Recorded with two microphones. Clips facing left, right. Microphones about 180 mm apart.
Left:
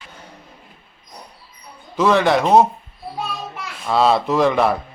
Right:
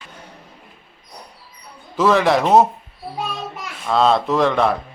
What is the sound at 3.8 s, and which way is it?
Speech, 5° left (ahead or behind).